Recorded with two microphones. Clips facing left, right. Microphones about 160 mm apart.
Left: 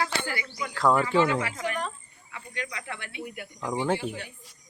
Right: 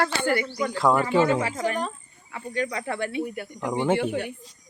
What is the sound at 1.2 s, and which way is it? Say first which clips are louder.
Speech: right 4 dB; 35° right (ahead or behind).